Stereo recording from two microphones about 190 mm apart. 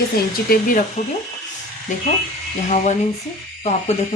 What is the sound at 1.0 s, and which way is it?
Speech, 40° left (ahead or behind).